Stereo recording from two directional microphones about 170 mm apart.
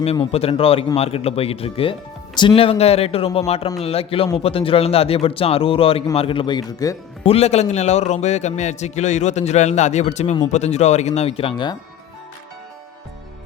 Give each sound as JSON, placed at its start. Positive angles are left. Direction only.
{"t": 0.0, "sound": "speech", "side_deg": 35}
{"t": 7.3, "sound": "a man's voice", "side_deg": 40}